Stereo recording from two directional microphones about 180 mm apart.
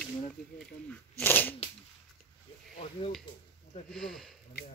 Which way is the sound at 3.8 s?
Centre (ahead or behind).